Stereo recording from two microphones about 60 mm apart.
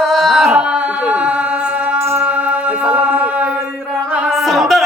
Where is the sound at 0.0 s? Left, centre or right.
Centre.